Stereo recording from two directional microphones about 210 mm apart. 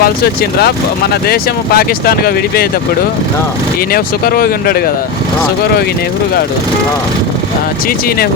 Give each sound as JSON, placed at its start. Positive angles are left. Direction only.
{"t": 1.1, "sound": "speech", "side_deg": 45}
{"t": 3.9, "sound": "speech", "side_deg": 45}